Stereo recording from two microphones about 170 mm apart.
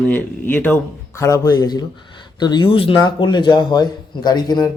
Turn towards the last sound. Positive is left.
turn(degrees=25)  # may be behind; listen again after turning